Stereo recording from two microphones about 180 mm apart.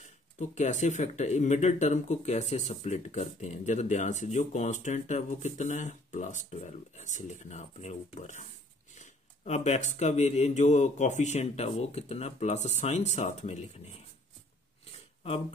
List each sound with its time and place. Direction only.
0.4 s speech: 40° left (ahead or behind)